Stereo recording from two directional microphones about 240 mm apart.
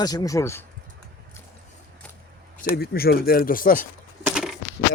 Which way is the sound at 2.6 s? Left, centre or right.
Left.